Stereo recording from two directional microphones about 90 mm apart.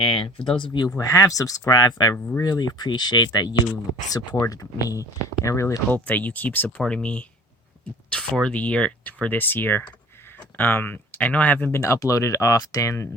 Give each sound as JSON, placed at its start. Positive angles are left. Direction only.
{"t": 0.0, "sound": "speech", "side_deg": 70}
{"t": 0.9, "sound": "speech", "side_deg": 35}
{"t": 5.9, "sound": "speech", "side_deg": 20}
{"t": 11.8, "sound": "speech", "side_deg": 35}